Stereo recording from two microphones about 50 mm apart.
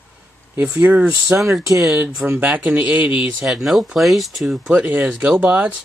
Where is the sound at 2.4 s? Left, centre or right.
Right.